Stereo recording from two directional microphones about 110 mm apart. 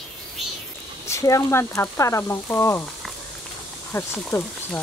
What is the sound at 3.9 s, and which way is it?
Speech, 20° left (ahead or behind).